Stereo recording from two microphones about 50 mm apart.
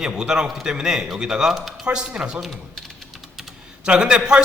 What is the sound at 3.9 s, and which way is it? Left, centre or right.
Speech, centre.